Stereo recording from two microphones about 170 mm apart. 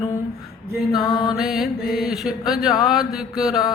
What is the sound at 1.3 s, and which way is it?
Mantra, centre (ahead or behind).